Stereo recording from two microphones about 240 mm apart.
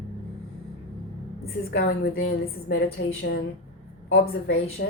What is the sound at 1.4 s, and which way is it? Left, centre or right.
A woman's voice, left.